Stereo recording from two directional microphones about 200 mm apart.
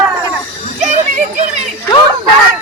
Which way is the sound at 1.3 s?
35° right (ahead or behind).